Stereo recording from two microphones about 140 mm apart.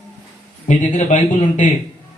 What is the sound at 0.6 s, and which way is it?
Speech, 60° left (ahead or behind).